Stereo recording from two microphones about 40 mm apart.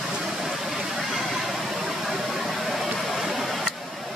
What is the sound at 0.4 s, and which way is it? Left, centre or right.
Vehicle, centre.